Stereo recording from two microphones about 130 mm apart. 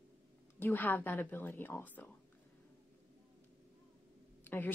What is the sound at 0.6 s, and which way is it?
Speech, 15° left (ahead or behind).